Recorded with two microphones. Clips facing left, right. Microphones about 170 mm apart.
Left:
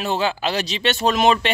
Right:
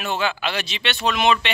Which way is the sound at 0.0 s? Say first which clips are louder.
Left 3 dB; 35° left (ahead or behind).